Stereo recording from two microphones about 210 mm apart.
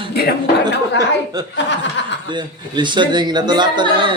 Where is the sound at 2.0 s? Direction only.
60° left (ahead or behind).